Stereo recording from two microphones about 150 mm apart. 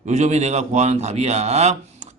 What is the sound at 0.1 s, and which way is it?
A man's voice, 50° right (ahead or behind).